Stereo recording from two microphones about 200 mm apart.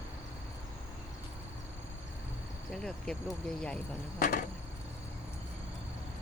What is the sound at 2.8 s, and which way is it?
Speech, 5° left (ahead or behind).